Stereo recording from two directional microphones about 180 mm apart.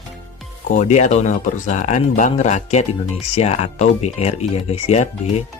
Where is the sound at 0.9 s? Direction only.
40° left (ahead or behind).